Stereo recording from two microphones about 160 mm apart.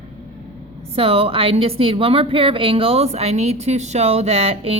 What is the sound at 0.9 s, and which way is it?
A woman's voice, 35° right (ahead or behind).